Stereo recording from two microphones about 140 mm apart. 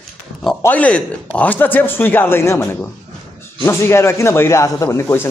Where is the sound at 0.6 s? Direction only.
10° left (ahead or behind).